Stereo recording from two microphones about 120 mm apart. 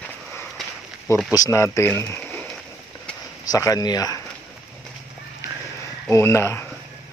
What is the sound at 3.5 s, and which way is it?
Speech, 30° left (ahead or behind).